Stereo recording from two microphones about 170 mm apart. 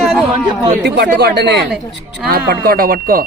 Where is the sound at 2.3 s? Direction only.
65° right (ahead or behind).